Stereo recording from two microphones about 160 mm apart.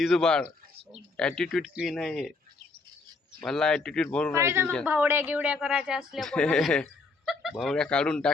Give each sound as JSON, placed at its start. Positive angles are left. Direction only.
{"t": 0.0, "sound": "speech", "side_deg": 5}
{"t": 3.4, "sound": "speech", "side_deg": 5}
{"t": 4.4, "sound": "speech", "side_deg": -15}